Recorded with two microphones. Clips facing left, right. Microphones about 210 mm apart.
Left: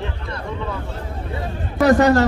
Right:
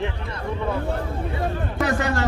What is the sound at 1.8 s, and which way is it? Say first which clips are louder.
Chatter: left 10 dB; 40° left (ahead or behind).